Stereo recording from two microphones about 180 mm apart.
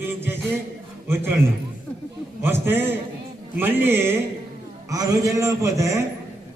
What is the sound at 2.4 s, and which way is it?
A man's voice, 10° right (ahead or behind).